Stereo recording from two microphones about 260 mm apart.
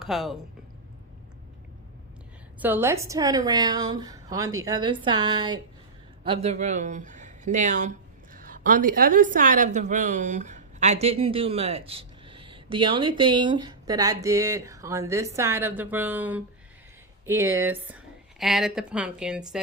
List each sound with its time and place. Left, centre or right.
0.0 s speech: centre
2.6 s a woman's voice: centre